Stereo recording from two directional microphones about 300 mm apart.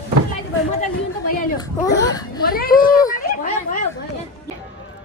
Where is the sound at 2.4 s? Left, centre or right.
Left.